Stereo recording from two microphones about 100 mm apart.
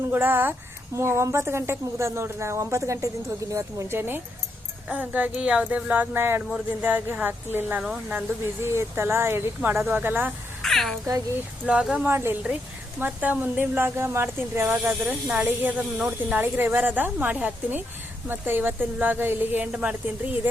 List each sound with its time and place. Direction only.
0.1 s a woman's voice: 20° right (ahead or behind)
7.8 s speech: 5° right (ahead or behind)
8.6 s a woman's voice: 25° right (ahead or behind)
10.6 s a sound: 5° left (ahead or behind)
11.6 s a woman's voice: 10° right (ahead or behind)